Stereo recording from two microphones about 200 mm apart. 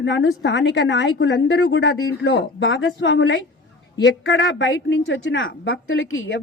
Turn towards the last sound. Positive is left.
turn(degrees=80)